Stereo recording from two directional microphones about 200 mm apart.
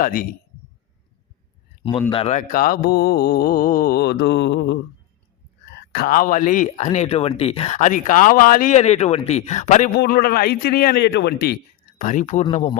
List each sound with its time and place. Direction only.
0.0 s speech: 45° left (ahead or behind)
1.8 s speech: 25° left (ahead or behind)
10.0 s speech: 50° left (ahead or behind)
11.9 s speech: 40° left (ahead or behind)